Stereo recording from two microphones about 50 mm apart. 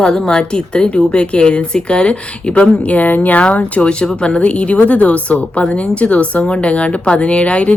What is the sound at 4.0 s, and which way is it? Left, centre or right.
Speech, centre.